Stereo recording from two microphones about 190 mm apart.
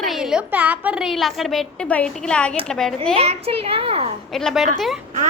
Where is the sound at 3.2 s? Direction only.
30° right (ahead or behind).